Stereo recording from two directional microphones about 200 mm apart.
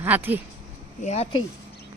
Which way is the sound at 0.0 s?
10° right (ahead or behind).